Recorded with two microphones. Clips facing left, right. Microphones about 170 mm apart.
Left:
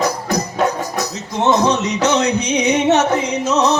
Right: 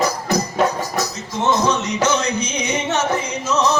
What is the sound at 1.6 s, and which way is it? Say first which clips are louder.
Music: left 2 dB; 65° left (ahead or behind).